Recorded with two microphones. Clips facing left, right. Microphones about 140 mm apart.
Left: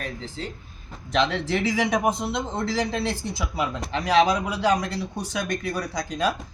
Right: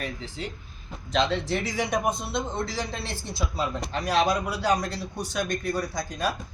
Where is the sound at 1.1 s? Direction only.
75° left (ahead or behind).